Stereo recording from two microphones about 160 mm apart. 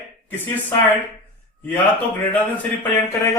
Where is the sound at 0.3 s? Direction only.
10° left (ahead or behind).